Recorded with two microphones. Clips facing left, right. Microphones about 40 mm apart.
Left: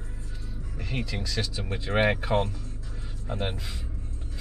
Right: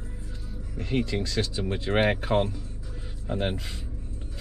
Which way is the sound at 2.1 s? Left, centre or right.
Centre.